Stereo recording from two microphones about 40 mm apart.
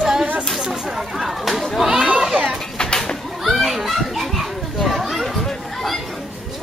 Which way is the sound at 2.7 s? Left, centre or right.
Centre.